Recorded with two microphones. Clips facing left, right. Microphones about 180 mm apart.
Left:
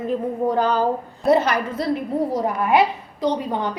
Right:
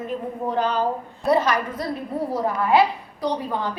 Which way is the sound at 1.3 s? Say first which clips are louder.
Left 2 dB; 25° left (ahead or behind).